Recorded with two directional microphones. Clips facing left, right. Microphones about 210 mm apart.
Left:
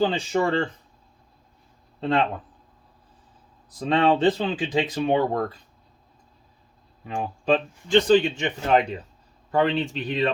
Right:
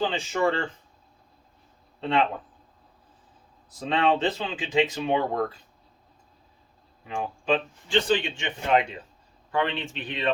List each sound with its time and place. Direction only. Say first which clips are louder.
0.0 s speech: left 3 dB; 35° left (ahead or behind)
2.0 s speech: left 2 dB; 35° left (ahead or behind)
3.8 s speech: left 4 dB; 35° left (ahead or behind)
7.1 s speech: left 3 dB; 40° left (ahead or behind)